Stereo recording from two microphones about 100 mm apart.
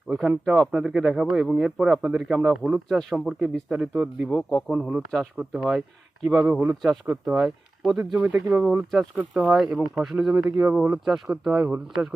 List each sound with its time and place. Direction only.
0.1 s speech: 5° right (ahead or behind)
4.3 s a man's voice: 10° left (ahead or behind)
4.7 s speech: 5° right (ahead or behind)
6.5 s speech: 15° right (ahead or behind)
8.9 s speech: 5° right (ahead or behind)
11.5 s speech: 15° right (ahead or behind)